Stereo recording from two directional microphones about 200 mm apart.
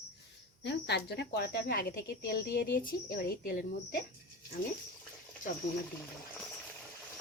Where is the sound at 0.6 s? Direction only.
60° left (ahead or behind).